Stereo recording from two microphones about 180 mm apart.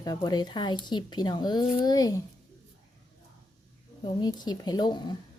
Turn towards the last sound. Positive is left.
turn(degrees=25)  # may be behind; listen again after turning